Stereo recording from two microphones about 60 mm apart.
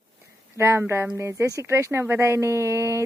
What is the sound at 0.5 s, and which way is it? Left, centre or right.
A woman's voice, right.